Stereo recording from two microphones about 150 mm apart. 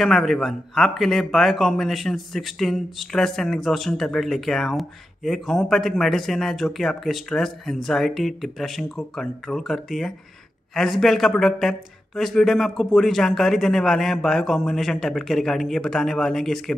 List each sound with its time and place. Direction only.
0.0 s a man's voice: centre (ahead or behind)